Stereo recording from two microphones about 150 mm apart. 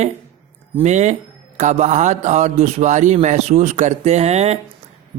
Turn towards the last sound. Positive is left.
turn(degrees=-45)  # may be behind; listen again after turning